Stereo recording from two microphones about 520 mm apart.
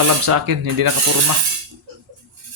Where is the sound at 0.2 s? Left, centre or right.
Right.